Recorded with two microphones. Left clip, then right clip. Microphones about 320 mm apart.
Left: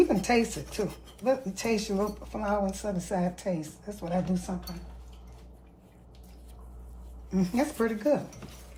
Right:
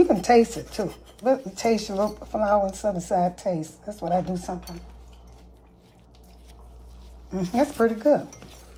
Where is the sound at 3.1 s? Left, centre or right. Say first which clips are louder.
Right 7 dB; right.